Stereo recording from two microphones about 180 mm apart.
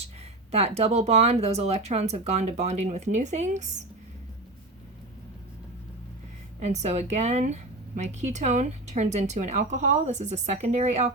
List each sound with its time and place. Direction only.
0.5 s speech: 35° right (ahead or behind)
6.6 s speech: 40° right (ahead or behind)